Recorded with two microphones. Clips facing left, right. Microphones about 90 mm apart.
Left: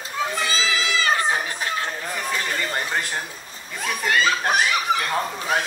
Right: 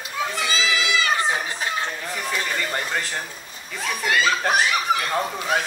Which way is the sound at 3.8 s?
Centre (ahead or behind).